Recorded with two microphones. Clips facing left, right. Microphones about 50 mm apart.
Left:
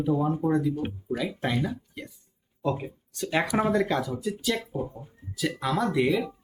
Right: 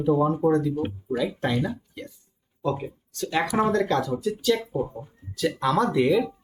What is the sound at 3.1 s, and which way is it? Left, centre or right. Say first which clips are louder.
Speech: right 1 dB; centre.